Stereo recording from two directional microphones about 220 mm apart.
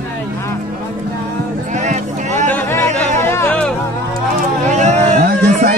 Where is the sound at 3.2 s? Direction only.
10° left (ahead or behind).